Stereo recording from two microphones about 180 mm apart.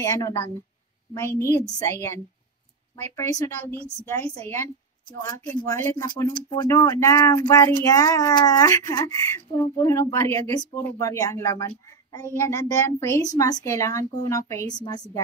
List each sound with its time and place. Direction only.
0.0 s speech: 15° left (ahead or behind)